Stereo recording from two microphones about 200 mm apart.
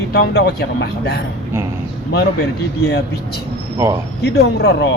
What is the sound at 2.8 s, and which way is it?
Speech, 55° left (ahead or behind).